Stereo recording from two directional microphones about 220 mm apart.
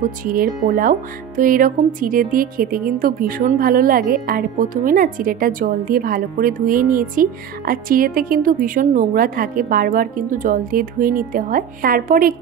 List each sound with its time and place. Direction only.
0.2 s speech: 40° right (ahead or behind)